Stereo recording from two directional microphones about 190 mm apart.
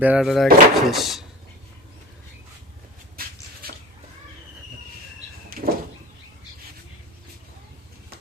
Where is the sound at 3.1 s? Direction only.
55° right (ahead or behind).